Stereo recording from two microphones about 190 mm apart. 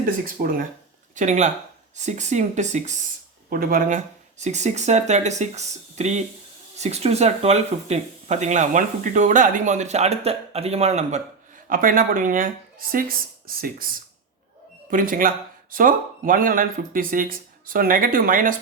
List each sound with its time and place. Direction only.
0.0 s speech: 50° right (ahead or behind)
3.5 s speech: 50° right (ahead or behind)
11.7 s speech: 45° right (ahead or behind)